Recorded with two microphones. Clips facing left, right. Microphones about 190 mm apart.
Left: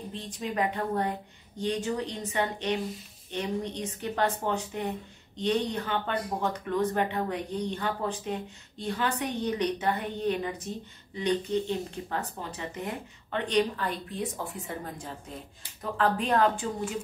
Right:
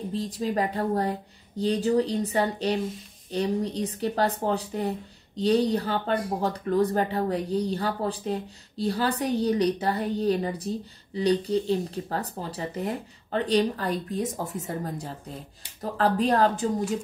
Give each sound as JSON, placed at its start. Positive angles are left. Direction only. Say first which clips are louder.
{"t": 0.1, "sound": "speech", "louder": "right 7 dB", "side_deg": -35}